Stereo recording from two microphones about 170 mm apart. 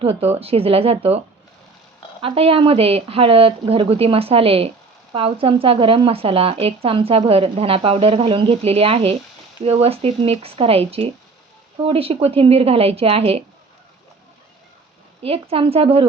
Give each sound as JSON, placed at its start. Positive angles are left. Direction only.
{"t": 0.0, "sound": "speech", "side_deg": -35}
{"t": 2.2, "sound": "speech", "side_deg": -35}
{"t": 15.2, "sound": "speech", "side_deg": -35}